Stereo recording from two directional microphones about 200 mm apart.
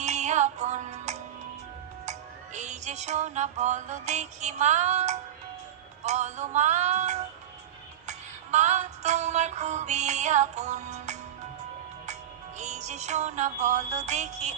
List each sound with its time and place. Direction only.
0.0 s music: 35° right (ahead or behind)
12.5 s music: 35° right (ahead or behind)